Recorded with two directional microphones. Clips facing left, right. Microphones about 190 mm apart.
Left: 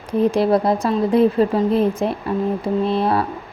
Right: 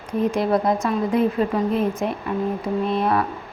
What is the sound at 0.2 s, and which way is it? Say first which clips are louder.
A woman's voice: left 4 dB; 35° left (ahead or behind).